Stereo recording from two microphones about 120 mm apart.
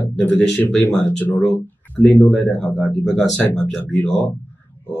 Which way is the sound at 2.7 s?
Centre (ahead or behind).